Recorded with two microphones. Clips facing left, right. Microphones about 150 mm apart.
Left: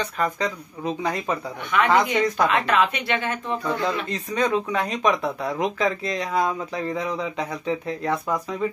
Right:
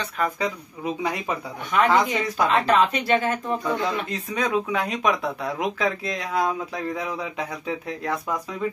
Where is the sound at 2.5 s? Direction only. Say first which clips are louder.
Right 2 dB; 30° right (ahead or behind).